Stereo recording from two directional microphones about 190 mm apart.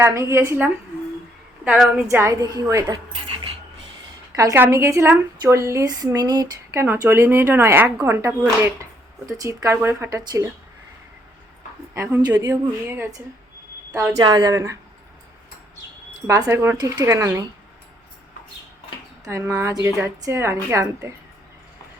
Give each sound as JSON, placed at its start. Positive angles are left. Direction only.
{"t": 0.0, "sound": "a woman's voice", "side_deg": -15}
{"t": 2.0, "sound": "a woman's voice", "side_deg": -15}
{"t": 4.4, "sound": "a woman's voice", "side_deg": -15}
{"t": 11.9, "sound": "a woman's voice", "side_deg": -15}
{"t": 14.1, "sound": "speech", "side_deg": -25}
{"t": 16.2, "sound": "a woman's voice", "side_deg": -15}
{"t": 19.2, "sound": "a woman's voice", "side_deg": -15}